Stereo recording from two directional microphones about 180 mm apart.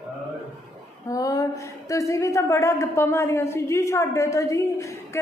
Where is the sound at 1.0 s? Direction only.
20° left (ahead or behind).